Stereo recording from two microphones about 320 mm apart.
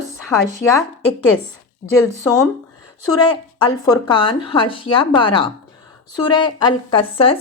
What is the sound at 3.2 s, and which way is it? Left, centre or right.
Speech, centre.